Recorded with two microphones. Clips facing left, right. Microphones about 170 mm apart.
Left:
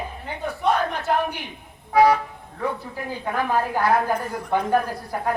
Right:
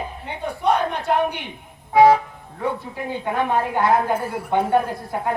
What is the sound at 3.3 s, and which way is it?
Speech, 25° right (ahead or behind).